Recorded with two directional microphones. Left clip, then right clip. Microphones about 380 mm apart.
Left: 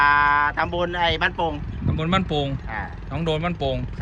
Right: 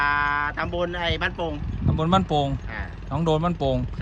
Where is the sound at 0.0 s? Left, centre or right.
Centre.